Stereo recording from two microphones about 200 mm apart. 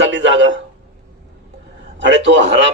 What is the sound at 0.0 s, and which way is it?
Speech, 65° right (ahead or behind).